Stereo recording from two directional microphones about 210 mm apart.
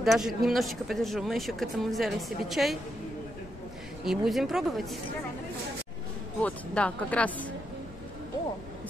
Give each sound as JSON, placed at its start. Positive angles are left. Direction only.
{"t": 0.0, "sound": "speech", "side_deg": 0}
{"t": 4.0, "sound": "speech", "side_deg": 0}
{"t": 6.4, "sound": "speech", "side_deg": 5}